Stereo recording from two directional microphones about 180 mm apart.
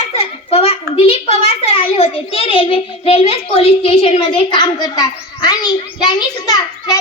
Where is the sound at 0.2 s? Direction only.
35° left (ahead or behind).